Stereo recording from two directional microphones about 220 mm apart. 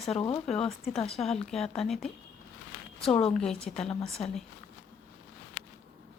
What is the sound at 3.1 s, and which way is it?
Speech, 25° left (ahead or behind).